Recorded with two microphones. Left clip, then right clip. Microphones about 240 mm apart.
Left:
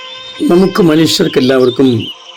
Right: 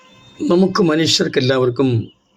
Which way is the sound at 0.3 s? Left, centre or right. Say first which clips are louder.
Left 6 dB; centre.